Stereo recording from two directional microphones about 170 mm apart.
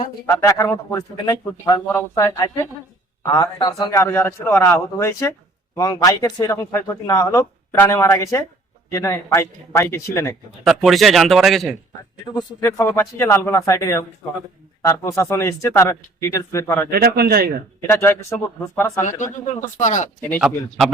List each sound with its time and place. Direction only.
0.3 s speech: 15° left (ahead or behind)
10.6 s a man's voice: centre (ahead or behind)
12.6 s speech: 15° left (ahead or behind)
16.9 s a man's voice: 65° right (ahead or behind)
17.7 s speech: 15° left (ahead or behind)
19.8 s speech: 45° left (ahead or behind)
20.4 s a man's voice: centre (ahead or behind)